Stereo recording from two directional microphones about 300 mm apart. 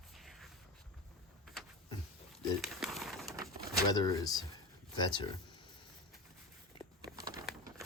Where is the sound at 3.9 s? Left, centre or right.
Centre.